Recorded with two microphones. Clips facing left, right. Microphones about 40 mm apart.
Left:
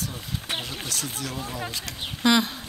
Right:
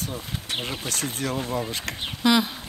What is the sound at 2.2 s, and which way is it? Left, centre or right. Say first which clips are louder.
Speech: even; centre.